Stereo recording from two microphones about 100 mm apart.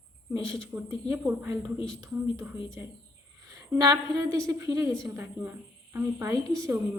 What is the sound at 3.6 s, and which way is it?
A woman's voice, 40° right (ahead or behind).